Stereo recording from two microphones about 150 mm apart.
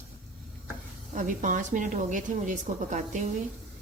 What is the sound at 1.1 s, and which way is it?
Speech, 60° right (ahead or behind).